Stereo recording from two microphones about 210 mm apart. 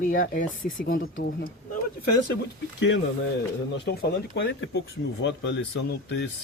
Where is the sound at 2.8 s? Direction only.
60° left (ahead or behind).